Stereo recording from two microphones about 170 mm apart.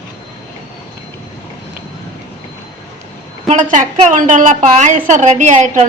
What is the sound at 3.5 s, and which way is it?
A woman's voice, 45° right (ahead or behind).